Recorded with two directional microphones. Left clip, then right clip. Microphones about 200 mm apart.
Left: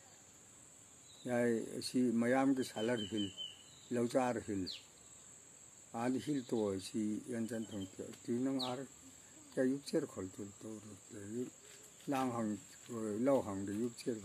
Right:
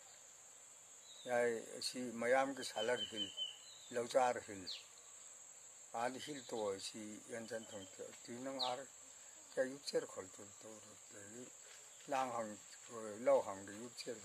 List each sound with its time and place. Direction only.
1.2 s speech: centre (ahead or behind)
5.9 s speech: centre (ahead or behind)